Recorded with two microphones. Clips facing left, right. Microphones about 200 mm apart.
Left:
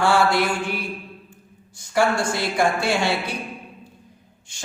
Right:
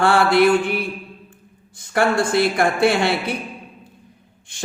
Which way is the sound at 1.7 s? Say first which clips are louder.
Right 2 dB; 60° right (ahead or behind).